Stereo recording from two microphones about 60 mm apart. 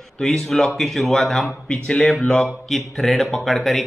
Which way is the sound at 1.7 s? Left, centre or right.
Centre.